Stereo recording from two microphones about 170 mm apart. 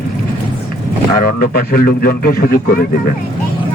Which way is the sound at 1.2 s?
60° left (ahead or behind).